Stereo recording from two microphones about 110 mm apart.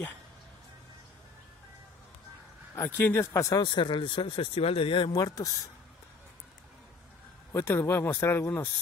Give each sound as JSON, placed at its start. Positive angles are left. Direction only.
{"t": 2.7, "sound": "speech", "side_deg": 25}
{"t": 3.6, "sound": "speech", "side_deg": 45}
{"t": 7.5, "sound": "speech", "side_deg": 20}